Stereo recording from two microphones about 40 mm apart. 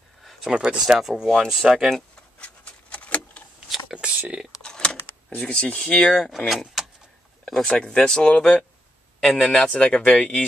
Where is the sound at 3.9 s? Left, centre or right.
Right.